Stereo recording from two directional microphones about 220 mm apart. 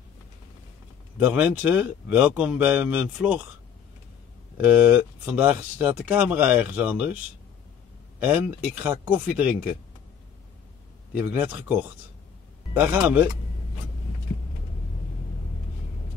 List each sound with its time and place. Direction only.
1.2 s speech: 5° right (ahead or behind)
4.6 s speech: 5° right (ahead or behind)
8.2 s speech: 5° right (ahead or behind)
11.3 s speech: 10° right (ahead or behind)